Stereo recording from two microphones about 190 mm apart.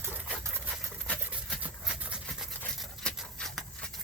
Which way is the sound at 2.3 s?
Centre (ahead or behind).